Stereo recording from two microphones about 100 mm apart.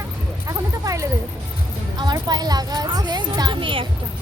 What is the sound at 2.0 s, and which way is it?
Speech, 45° right (ahead or behind).